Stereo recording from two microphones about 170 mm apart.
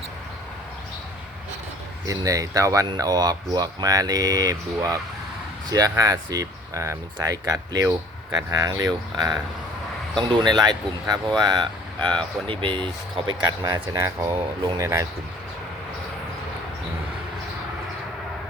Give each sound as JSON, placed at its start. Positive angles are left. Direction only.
{"t": 2.0, "sound": "speech", "side_deg": -20}
{"t": 10.4, "sound": "speech", "side_deg": -25}